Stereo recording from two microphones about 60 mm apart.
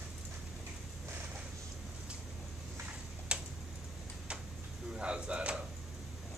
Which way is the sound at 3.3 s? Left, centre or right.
Centre.